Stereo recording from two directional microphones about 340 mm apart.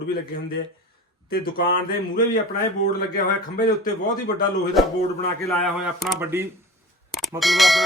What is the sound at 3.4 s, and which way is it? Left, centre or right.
Speech, centre.